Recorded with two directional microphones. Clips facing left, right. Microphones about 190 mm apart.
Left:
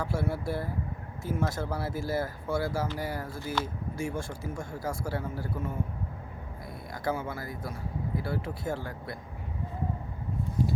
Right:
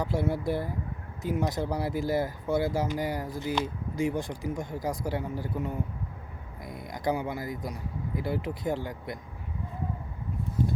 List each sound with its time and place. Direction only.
0.0 s speech: 20° right (ahead or behind)